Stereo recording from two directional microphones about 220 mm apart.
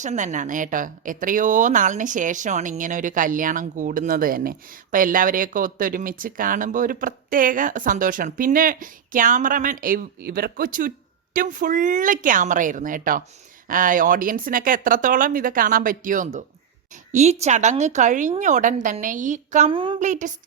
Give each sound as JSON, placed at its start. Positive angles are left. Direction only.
{"t": 0.0, "sound": "speech", "side_deg": -35}
{"t": 20.0, "sound": "speech", "side_deg": -35}